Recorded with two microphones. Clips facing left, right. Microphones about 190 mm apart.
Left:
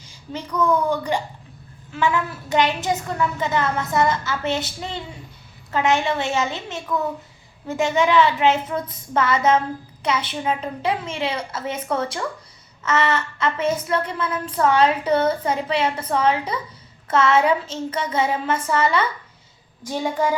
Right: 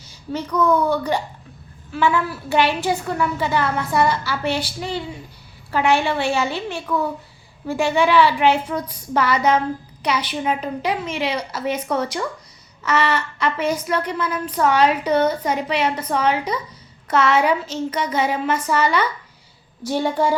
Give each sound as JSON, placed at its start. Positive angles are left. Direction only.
{"t": 0.0, "sound": "a woman's voice", "side_deg": 10}